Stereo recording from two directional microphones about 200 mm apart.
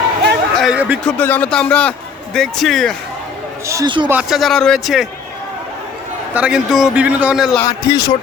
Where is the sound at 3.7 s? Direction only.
20° right (ahead or behind).